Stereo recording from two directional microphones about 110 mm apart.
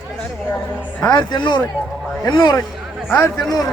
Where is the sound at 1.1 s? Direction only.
45° left (ahead or behind).